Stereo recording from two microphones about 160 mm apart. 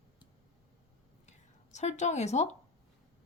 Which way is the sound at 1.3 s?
45° left (ahead or behind).